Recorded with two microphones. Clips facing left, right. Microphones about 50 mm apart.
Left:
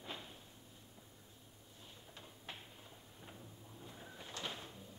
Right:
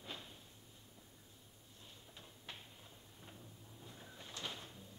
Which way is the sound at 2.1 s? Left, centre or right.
Centre.